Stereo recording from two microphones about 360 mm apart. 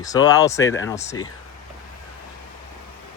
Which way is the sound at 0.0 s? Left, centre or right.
Centre.